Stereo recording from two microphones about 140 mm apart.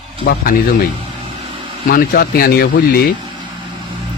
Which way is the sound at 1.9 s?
90° left.